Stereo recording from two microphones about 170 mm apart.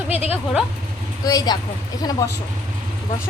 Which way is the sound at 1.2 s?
20° left (ahead or behind).